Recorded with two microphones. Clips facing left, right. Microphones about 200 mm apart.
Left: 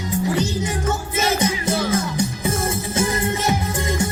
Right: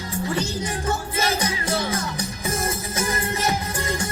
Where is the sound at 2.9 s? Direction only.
25° left (ahead or behind).